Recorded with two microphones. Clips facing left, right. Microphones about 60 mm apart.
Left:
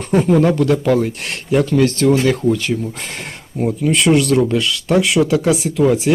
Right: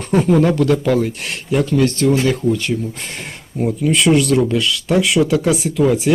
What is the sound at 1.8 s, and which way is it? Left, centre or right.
Speech, left.